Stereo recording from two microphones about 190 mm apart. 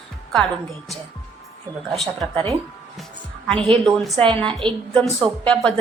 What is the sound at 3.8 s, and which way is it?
A woman's voice, centre (ahead or behind).